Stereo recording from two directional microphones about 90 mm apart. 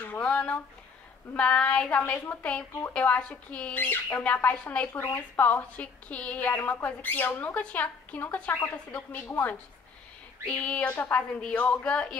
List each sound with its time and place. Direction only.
0.0 s a woman's voice: 15° left (ahead or behind)